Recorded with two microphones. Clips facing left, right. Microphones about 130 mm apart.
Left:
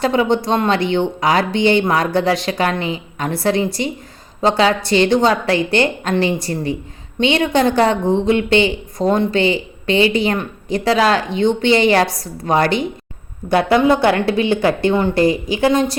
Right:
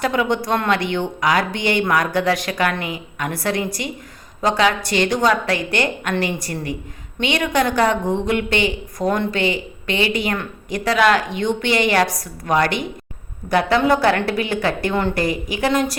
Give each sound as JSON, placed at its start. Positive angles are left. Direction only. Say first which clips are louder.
{"t": 0.0, "sound": "a woman's voice", "louder": "left 4 dB", "side_deg": 30}